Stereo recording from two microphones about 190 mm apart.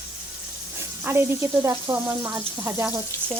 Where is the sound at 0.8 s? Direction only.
10° right (ahead or behind).